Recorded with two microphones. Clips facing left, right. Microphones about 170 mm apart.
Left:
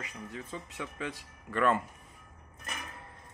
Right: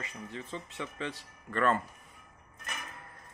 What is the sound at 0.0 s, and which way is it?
Speech, 10° left (ahead or behind).